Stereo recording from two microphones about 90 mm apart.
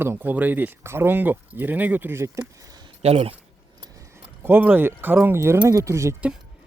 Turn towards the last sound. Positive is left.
turn(degrees=-35)  # may be behind; listen again after turning